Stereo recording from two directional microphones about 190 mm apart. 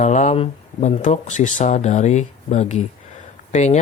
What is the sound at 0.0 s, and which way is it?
Speech, 40° left (ahead or behind).